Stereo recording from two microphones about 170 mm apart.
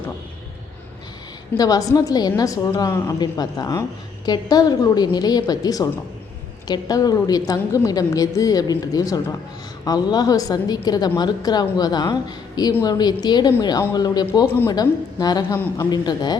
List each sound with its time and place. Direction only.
1.5 s a woman's voice: 20° left (ahead or behind)
14.4 s a woman's voice: 10° left (ahead or behind)
14.7 s a woman's voice: 25° left (ahead or behind)
15.5 s a woman's voice: 10° left (ahead or behind)
15.9 s a woman's voice: 25° left (ahead or behind)